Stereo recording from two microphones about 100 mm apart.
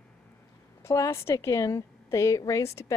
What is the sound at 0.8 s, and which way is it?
A woman's voice, 30° left (ahead or behind).